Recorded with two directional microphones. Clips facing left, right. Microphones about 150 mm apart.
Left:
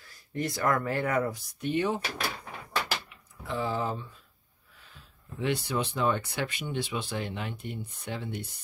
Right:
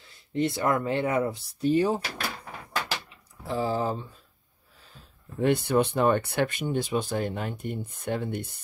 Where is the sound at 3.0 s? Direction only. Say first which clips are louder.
Right 3 dB; 35° right (ahead or behind).